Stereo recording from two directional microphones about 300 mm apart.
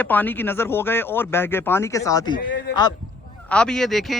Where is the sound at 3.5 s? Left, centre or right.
Centre.